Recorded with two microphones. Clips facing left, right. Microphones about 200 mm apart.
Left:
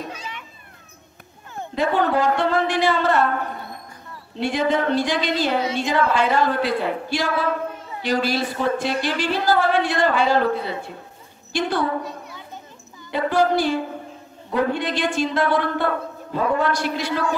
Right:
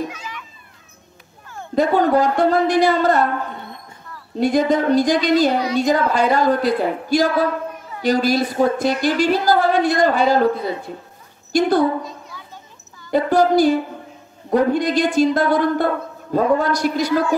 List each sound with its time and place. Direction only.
0.1 s children playing: 35° left (ahead or behind)
1.8 s a woman's voice: 40° right (ahead or behind)
4.4 s a woman's voice: 40° right (ahead or behind)
13.1 s a woman's voice: 40° right (ahead or behind)